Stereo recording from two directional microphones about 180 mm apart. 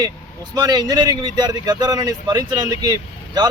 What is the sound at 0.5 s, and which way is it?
Speech, 20° right (ahead or behind).